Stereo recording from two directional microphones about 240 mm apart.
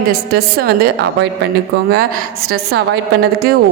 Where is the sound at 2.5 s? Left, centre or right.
Right.